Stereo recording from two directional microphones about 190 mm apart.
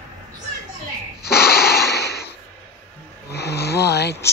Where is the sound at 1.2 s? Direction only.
55° left (ahead or behind).